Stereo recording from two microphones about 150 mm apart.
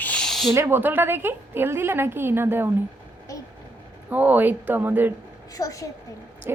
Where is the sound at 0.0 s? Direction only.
5° left (ahead or behind).